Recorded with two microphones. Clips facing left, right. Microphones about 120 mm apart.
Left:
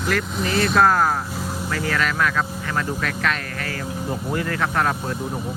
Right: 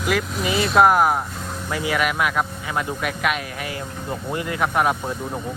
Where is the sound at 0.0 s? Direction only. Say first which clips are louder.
Right 1 dB; 5° right (ahead or behind).